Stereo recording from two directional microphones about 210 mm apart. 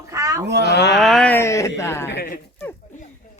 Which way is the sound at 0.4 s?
55° right (ahead or behind).